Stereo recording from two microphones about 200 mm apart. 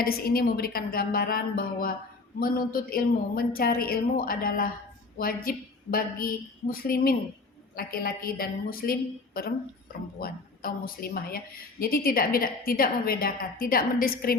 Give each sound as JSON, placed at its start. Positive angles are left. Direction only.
{"t": 0.0, "sound": "a woman's voice", "side_deg": 50}